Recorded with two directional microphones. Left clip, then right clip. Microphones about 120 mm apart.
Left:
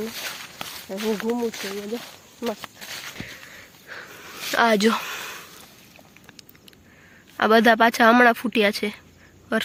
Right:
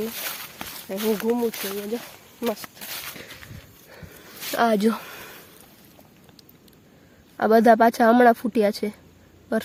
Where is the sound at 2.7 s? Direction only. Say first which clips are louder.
Even; 25° right (ahead or behind).